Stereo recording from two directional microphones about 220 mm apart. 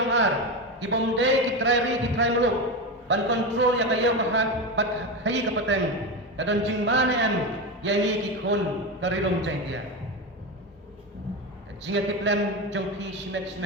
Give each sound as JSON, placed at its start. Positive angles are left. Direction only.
{"t": 0.0, "sound": "a sound", "side_deg": -55}
{"t": 0.8, "sound": "a man's voice", "side_deg": -55}
{"t": 11.9, "sound": "a man's voice", "side_deg": -55}